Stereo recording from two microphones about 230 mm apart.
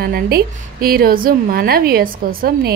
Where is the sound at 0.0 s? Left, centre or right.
Right.